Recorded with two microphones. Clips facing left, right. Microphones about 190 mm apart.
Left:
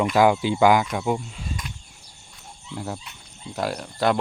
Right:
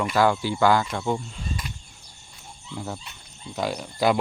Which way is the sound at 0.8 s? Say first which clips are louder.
Left 2 dB; 5° left (ahead or behind).